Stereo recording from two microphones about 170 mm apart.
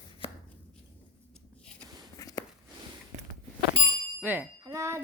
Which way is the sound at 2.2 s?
20° left (ahead or behind).